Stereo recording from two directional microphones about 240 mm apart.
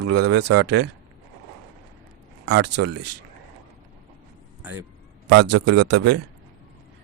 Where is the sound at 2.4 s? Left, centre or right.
Right.